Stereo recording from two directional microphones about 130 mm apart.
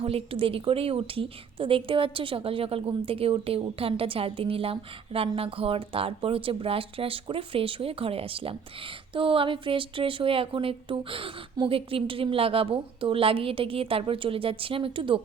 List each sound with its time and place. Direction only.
0.0 s a woman's voice: 45° right (ahead or behind)